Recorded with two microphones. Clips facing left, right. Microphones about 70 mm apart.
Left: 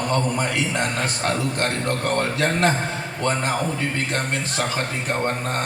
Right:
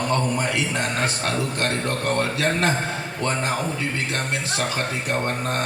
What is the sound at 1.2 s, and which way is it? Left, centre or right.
Speech, left.